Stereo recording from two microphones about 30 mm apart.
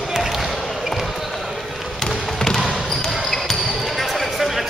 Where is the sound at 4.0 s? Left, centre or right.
Centre.